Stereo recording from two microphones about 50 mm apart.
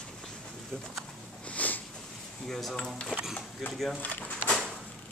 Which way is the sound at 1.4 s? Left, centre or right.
Left.